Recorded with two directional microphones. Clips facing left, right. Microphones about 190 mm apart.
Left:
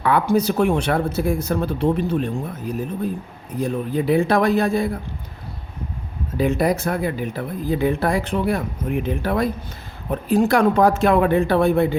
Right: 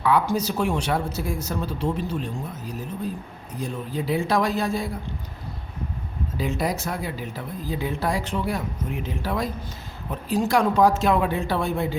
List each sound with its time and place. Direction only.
0.0 s speech: 55° left (ahead or behind)
6.3 s speech: 60° left (ahead or behind)